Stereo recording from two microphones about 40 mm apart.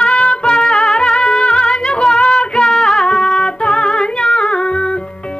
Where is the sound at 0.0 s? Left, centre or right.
Left.